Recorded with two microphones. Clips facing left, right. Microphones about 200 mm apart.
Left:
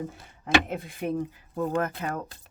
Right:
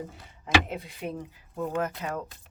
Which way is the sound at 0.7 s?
50° left (ahead or behind).